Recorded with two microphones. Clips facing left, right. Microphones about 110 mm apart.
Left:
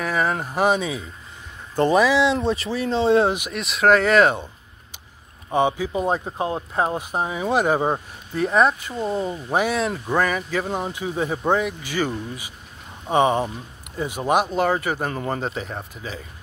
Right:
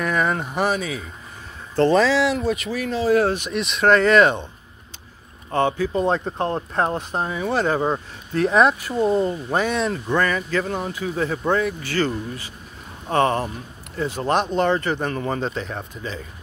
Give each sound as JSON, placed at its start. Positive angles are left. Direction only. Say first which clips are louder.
{"t": 0.0, "sound": "speech", "louder": "right 1 dB", "side_deg": 0}
{"t": 0.7, "sound": "speech", "louder": "left 3 dB", "side_deg": 25}
{"t": 2.3, "sound": "speech", "louder": "even", "side_deg": 30}
{"t": 3.3, "sound": "speech", "louder": "right 3 dB", "side_deg": 5}
{"t": 5.5, "sound": "speech", "louder": "even", "side_deg": 15}
{"t": 8.4, "sound": "speech", "louder": "right 2 dB", "side_deg": 0}